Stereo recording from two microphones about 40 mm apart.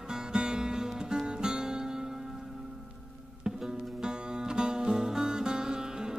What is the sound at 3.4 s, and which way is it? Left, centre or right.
Music, centre.